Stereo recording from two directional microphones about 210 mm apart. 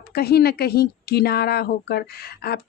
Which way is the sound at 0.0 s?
50° left (ahead or behind).